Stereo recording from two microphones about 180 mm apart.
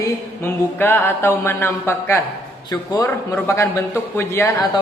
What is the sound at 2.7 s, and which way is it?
Speech, 20° left (ahead or behind).